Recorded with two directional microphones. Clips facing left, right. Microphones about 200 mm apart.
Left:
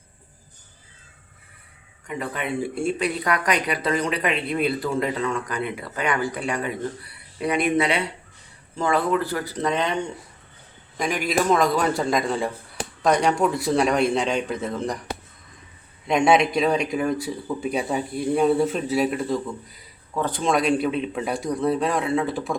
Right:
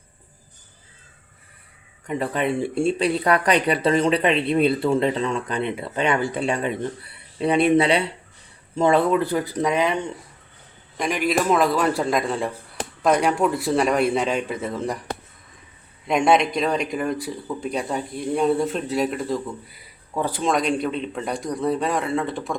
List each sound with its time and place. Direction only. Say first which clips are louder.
2.0 s speech: right 5 dB; 35° right (ahead or behind); by 14.9 s 5° right (ahead or behind)
16.0 s speech: even; centre (ahead or behind)